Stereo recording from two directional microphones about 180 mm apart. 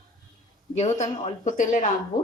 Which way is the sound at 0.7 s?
40° left (ahead or behind).